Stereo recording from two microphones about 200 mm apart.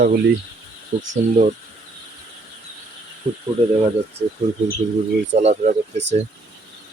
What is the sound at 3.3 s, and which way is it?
Speech, 25° right (ahead or behind).